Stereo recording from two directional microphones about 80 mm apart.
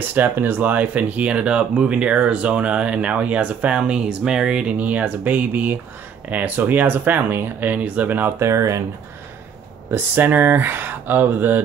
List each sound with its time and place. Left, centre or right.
0.1 s speech: right
8.4 s speech: right
9.8 s speech: right